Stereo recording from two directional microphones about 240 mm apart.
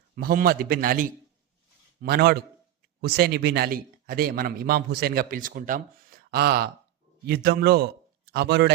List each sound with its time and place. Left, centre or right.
0.2 s a man's voice: right